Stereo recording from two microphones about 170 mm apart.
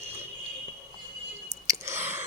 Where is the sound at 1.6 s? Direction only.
15° right (ahead or behind).